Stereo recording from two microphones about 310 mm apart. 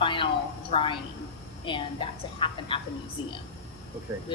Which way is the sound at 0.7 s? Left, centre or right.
Centre.